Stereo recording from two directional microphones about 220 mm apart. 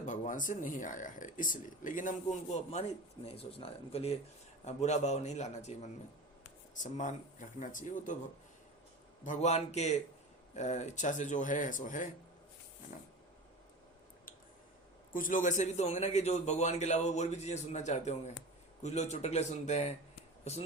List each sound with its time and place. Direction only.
0.0 s a man's voice: 35° left (ahead or behind)
9.2 s a man's voice: 35° left (ahead or behind)
15.1 s a man's voice: 35° left (ahead or behind)